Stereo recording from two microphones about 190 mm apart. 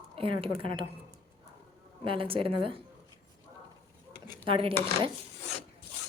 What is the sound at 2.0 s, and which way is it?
Speech, 30° right (ahead or behind).